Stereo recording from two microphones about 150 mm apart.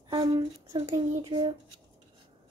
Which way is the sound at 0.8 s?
25° right (ahead or behind).